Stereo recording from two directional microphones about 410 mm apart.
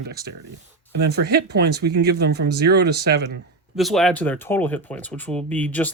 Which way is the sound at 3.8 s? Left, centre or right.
Centre.